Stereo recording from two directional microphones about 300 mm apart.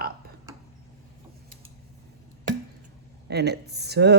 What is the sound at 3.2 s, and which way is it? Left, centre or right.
Speech, right.